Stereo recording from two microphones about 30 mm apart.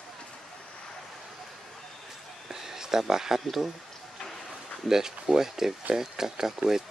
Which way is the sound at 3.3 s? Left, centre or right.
Centre.